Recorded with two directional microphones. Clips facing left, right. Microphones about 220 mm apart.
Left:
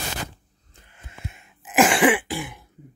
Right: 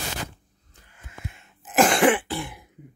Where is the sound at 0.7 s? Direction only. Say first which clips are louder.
Right 1 dB; 25° left (ahead or behind).